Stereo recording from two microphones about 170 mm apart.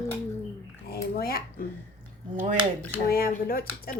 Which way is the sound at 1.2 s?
60° left (ahead or behind).